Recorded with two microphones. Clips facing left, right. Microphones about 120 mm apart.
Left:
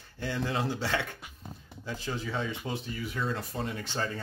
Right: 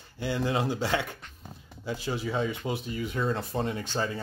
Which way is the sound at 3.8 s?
15° right (ahead or behind).